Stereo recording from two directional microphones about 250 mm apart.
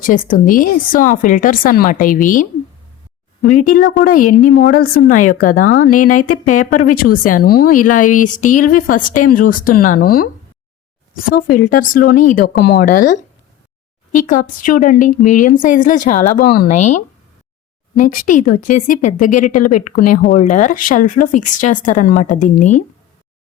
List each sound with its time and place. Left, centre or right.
0.0 s a woman's voice: left
5.9 s speech: left
6.4 s a woman's voice: left
11.3 s a woman's voice: left